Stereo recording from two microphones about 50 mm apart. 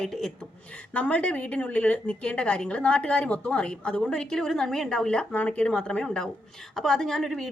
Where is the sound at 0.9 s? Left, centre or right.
Left.